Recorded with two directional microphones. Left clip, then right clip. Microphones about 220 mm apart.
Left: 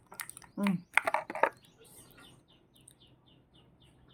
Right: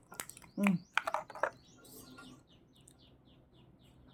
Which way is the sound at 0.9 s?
25° left (ahead or behind).